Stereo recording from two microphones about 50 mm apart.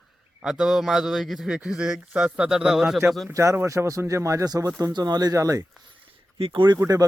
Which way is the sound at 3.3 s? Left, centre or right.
Right.